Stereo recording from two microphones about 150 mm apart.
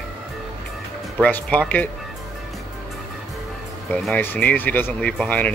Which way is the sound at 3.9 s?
10° left (ahead or behind).